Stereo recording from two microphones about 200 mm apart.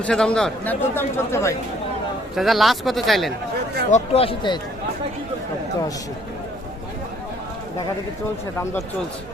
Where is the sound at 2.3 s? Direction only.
Centre (ahead or behind).